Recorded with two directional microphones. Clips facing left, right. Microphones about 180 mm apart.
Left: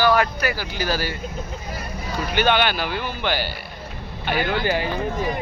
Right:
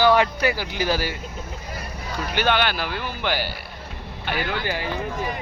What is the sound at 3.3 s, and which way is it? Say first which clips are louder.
Speech: even; 10° right (ahead or behind).